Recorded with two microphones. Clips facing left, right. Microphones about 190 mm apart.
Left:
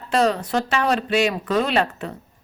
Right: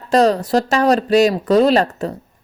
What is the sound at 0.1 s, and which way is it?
Speech, 35° right (ahead or behind).